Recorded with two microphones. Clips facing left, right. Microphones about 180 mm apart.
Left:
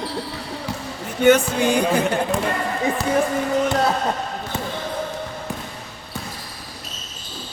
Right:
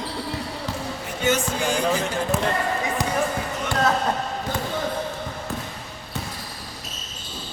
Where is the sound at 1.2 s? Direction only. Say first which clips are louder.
Left 8 dB; 60° left (ahead or behind).